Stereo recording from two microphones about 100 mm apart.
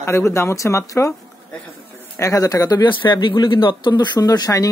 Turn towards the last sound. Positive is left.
turn(degrees=40)  # may be behind; listen again after turning